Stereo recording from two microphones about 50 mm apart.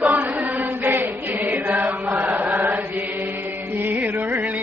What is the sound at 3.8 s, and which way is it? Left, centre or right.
Music, right.